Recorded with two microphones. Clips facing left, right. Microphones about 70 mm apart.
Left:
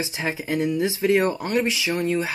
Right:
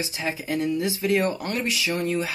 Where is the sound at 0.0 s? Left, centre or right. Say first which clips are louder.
Left 2 dB; left.